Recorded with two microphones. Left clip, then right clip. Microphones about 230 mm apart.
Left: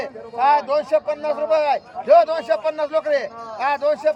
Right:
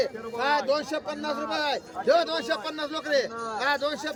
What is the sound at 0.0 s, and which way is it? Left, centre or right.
A man's voice, centre.